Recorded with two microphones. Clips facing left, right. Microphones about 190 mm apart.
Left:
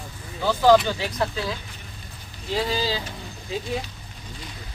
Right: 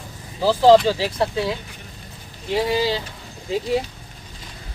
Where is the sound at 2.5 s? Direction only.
20° right (ahead or behind).